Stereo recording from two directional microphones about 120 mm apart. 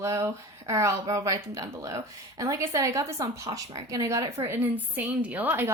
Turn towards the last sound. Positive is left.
turn(degrees=-15)  # may be behind; listen again after turning